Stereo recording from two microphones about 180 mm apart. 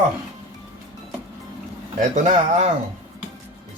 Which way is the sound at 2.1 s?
40° right (ahead or behind).